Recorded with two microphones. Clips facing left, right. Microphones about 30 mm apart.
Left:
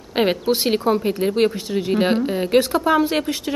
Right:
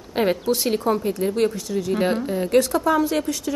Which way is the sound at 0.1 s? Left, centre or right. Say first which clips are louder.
Left 2 dB; left.